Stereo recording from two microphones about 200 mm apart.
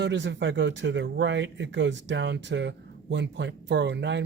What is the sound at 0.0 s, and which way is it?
Speech, 60° right (ahead or behind).